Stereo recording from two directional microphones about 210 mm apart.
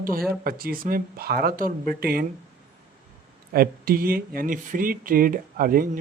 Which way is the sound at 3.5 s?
45° right (ahead or behind).